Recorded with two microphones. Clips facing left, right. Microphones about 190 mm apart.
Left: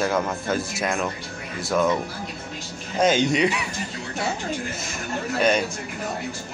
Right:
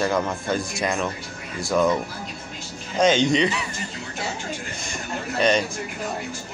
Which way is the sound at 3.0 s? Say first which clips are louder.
Right 1 dB; 10° left (ahead or behind).